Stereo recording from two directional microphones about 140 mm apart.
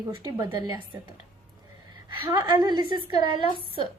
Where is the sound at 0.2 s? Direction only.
30° right (ahead or behind).